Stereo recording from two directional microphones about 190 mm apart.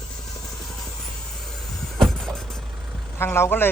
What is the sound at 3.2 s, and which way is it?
Speech, 15° left (ahead or behind).